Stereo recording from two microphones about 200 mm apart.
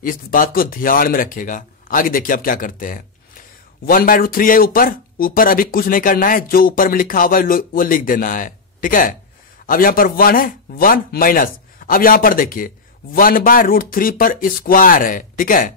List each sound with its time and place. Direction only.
0.0 s speech: 45° left (ahead or behind)